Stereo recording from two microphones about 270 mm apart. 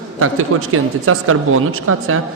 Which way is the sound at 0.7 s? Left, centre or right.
Right.